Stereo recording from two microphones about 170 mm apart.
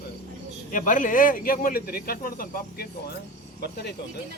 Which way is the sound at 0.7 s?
50° left (ahead or behind).